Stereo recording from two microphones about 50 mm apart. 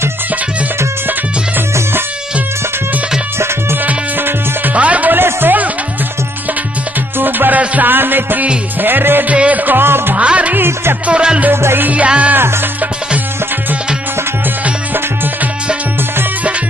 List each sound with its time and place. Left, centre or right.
3.7 s music: right
4.7 s music: right
5.1 s music: right
7.2 s music: right
9.3 s music: right
10.1 s music: right
11.5 s music: right
11.9 s music: right
12.4 s music: right